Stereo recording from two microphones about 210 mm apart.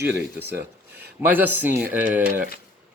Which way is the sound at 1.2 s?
10° right (ahead or behind).